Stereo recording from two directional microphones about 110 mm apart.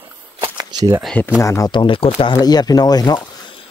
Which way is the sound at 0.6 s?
40° right (ahead or behind).